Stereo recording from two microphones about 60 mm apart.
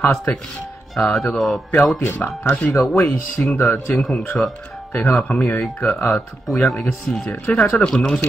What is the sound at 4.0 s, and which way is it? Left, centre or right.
Speech, centre.